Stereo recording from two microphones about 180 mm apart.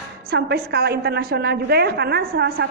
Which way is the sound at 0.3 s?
65° right (ahead or behind).